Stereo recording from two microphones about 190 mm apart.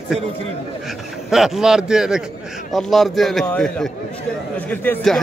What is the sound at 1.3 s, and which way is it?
Speech, centre (ahead or behind).